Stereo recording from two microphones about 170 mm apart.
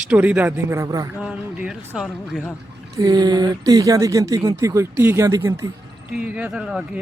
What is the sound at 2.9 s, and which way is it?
Speech, 25° right (ahead or behind).